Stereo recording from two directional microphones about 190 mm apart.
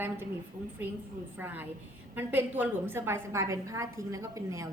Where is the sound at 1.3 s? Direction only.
10° right (ahead or behind).